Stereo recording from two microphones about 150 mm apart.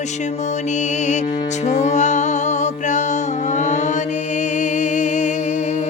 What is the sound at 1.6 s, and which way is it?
Music, 50° left (ahead or behind).